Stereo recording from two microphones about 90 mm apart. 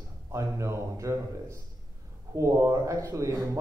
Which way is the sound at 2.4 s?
35° right (ahead or behind).